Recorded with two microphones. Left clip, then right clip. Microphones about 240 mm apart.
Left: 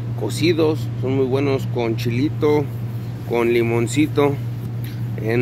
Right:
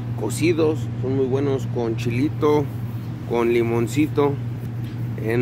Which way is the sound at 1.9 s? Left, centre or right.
Centre.